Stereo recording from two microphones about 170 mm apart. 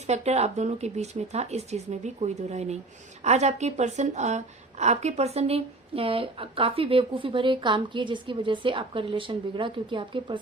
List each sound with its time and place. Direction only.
0.1 s a woman's voice: 40° right (ahead or behind)